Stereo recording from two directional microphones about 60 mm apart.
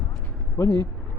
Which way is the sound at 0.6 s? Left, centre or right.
Left.